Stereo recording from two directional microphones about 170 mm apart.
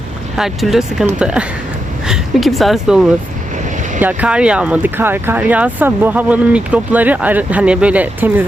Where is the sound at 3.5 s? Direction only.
45° right (ahead or behind).